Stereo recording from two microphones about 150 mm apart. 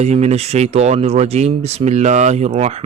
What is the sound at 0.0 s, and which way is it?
Speech, 50° right (ahead or behind).